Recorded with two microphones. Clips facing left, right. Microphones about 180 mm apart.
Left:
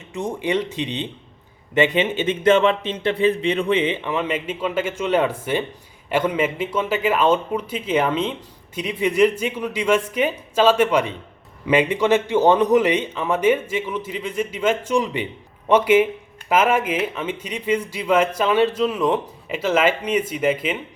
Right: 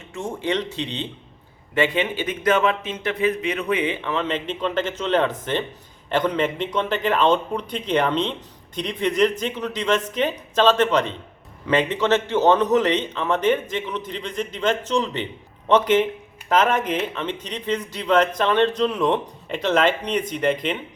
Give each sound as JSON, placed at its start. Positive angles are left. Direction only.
{"t": 0.1, "sound": "a man's voice", "side_deg": 15}